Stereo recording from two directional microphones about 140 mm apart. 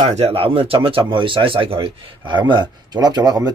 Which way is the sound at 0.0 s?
50° right (ahead or behind).